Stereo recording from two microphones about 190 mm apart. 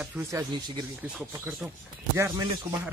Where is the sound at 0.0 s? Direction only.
10° right (ahead or behind).